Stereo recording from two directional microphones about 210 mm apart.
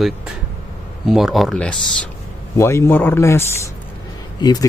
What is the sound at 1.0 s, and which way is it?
Speech, centre (ahead or behind).